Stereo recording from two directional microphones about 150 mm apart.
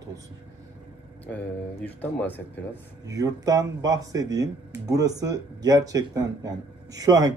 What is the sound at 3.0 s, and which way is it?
Speech, 25° right (ahead or behind).